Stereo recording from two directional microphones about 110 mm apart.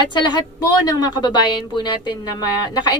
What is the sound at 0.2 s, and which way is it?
A woman's voice, 40° left (ahead or behind).